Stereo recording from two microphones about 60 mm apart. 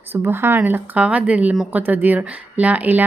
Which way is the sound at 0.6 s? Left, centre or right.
Right.